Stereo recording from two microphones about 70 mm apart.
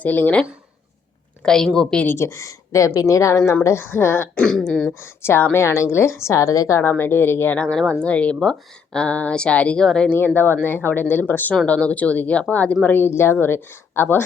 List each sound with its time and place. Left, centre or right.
0.0 s speech: left
1.5 s speech: centre
2.1 s a woman's voice: left
3.8 s a woman's voice: left
4.4 s speech: centre
4.9 s a woman's voice: left
6.8 s a woman's voice: left
7.6 s speech: centre
10.1 s a woman's voice: left